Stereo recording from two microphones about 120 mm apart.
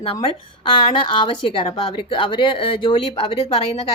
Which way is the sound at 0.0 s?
50° left (ahead or behind).